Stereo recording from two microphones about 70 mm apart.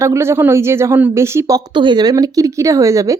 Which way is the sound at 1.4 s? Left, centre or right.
Right.